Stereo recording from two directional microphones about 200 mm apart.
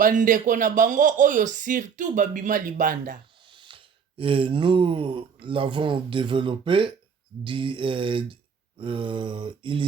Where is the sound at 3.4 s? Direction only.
25° right (ahead or behind).